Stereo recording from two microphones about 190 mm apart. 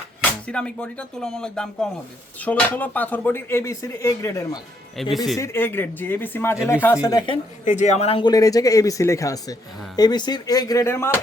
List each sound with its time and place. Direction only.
0.4 s speech: 5° left (ahead or behind)
5.1 s speech: centre (ahead or behind)
5.4 s a man's voice: 15° left (ahead or behind)
7.6 s a man's voice: 40° left (ahead or behind); by 11.2 s 15° left (ahead or behind)